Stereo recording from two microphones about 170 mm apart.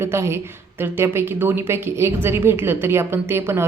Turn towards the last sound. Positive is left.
turn(degrees=-15)  # may be behind; listen again after turning